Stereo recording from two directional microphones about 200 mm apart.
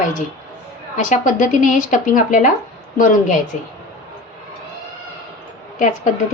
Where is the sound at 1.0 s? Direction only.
40° left (ahead or behind).